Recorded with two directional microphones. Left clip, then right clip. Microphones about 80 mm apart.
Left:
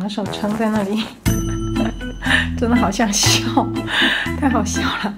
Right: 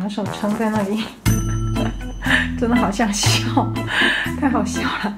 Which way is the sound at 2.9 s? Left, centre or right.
Left.